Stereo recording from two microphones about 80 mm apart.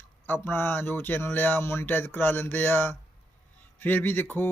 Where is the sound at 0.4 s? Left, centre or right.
Left.